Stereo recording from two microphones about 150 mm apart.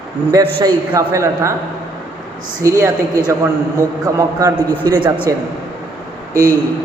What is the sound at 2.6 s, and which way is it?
A man's voice, 20° right (ahead or behind).